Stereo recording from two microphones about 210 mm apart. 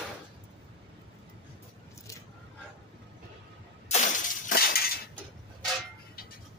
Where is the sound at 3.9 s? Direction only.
35° left (ahead or behind).